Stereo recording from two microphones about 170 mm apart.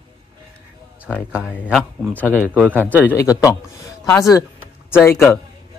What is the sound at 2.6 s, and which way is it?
Speech, 10° right (ahead or behind).